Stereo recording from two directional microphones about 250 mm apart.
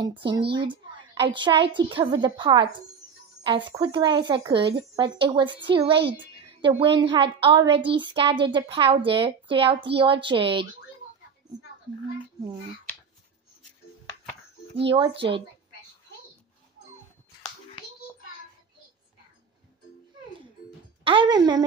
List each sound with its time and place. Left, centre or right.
0.2 s a child's voice: right
0.6 s a woman's voice: centre
14.9 s a woman's voice: right
21.0 s speech: centre